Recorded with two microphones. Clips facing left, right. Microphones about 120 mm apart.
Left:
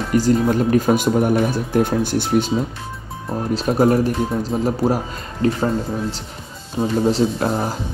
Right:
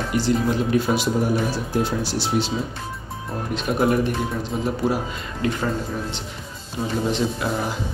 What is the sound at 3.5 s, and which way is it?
Speech, 35° left (ahead or behind).